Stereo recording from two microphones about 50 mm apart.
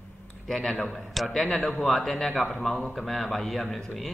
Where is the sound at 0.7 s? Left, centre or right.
Left.